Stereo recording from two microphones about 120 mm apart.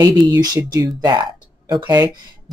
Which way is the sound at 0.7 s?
35° right (ahead or behind).